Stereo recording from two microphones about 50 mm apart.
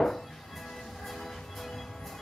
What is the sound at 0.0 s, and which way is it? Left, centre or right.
Music, centre.